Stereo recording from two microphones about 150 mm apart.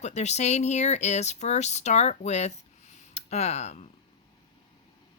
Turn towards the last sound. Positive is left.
turn(degrees=50)  # may be behind; listen again after turning